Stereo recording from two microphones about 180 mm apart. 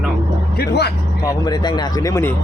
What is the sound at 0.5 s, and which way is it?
Speech, 65° left (ahead or behind).